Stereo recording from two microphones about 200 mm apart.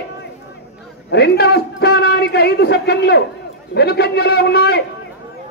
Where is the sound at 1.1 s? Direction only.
55° left (ahead or behind).